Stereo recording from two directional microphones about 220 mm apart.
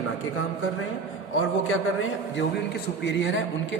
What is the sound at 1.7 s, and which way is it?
A man's voice, 60° left (ahead or behind).